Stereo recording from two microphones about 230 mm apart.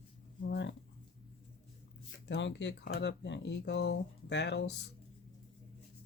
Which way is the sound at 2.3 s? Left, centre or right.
Left.